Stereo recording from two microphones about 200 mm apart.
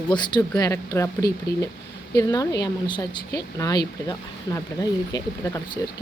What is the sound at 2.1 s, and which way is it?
Speech, 20° left (ahead or behind).